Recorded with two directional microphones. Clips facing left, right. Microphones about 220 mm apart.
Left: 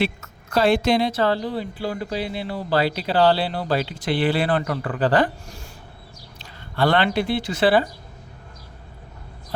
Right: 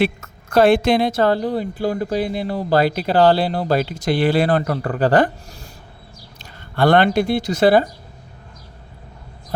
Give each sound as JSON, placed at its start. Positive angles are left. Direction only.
{"t": 0.0, "sound": "a woman's voice", "side_deg": -55}
{"t": 6.4, "sound": "speech", "side_deg": -50}